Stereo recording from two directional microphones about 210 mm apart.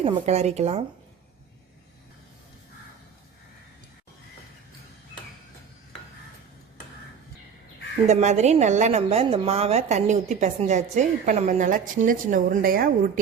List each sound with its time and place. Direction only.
0.0 s a woman's voice: 30° right (ahead or behind)
8.0 s a woman's voice: 35° right (ahead or behind)